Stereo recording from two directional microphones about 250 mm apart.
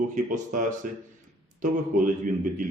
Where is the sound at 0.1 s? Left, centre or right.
Right.